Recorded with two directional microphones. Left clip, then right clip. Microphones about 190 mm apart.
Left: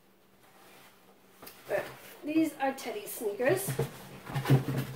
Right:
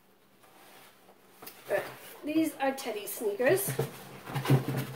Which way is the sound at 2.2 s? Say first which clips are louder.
Even; 15° right (ahead or behind).